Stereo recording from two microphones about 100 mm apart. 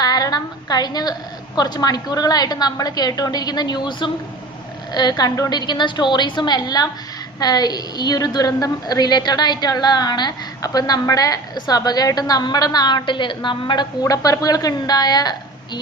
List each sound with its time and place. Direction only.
0.0 s a woman's voice: 40° left (ahead or behind)
14.0 s a woman's voice: 35° left (ahead or behind)